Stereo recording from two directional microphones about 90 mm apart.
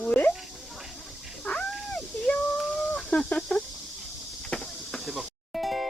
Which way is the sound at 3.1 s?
10° left (ahead or behind).